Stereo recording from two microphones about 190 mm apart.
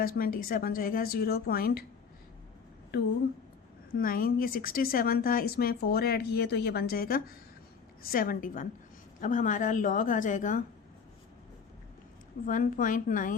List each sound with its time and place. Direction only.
0.0 s speech: 50° left (ahead or behind)
3.9 s speech: 50° left (ahead or behind)
12.5 s speech: 45° left (ahead or behind)